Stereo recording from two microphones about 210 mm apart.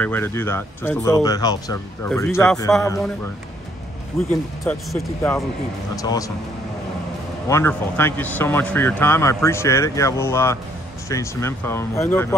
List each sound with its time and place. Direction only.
0.0 s speech: 10° left (ahead or behind)
4.3 s speech: 10° left (ahead or behind)
7.4 s speech: 10° left (ahead or behind)